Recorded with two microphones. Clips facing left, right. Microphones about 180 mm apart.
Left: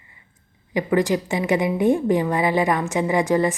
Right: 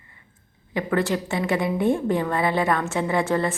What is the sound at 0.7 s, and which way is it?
A woman's voice, 15° left (ahead or behind).